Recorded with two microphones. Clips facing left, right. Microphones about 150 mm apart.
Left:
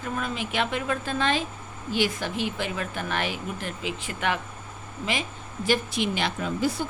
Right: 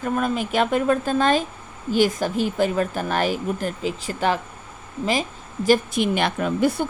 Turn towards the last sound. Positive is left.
turn(degrees=-60)  # may be behind; listen again after turning